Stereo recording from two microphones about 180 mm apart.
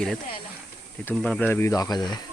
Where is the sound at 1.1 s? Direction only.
5° left (ahead or behind); by 2.2 s 25° left (ahead or behind).